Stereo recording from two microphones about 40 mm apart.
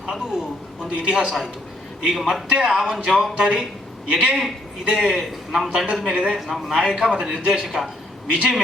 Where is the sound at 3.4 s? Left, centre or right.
Centre.